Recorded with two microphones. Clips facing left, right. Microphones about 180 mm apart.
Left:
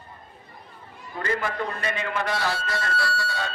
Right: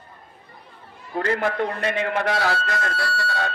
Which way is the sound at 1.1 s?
60° right (ahead or behind).